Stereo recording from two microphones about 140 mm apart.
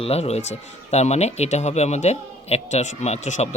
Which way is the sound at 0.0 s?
45° left (ahead or behind).